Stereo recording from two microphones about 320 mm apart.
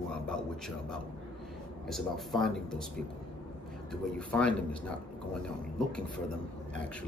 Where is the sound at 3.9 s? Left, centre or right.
Centre.